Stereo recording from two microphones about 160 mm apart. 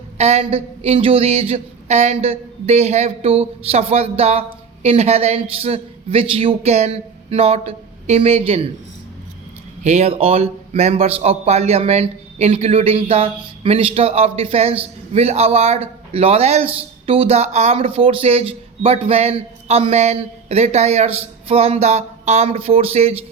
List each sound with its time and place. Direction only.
0.2 s a man's voice: 40° right (ahead or behind)
9.8 s a man's voice: 40° right (ahead or behind)